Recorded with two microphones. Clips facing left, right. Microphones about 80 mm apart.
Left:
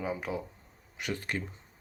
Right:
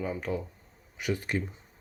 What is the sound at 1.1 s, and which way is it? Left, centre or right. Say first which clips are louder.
Speech: right 4 dB; centre.